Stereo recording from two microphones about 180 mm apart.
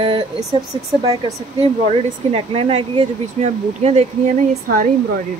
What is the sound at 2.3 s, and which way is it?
Speech, 30° right (ahead or behind).